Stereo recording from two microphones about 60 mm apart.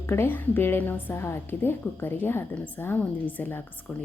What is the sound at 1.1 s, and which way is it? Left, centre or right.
A woman's voice, left.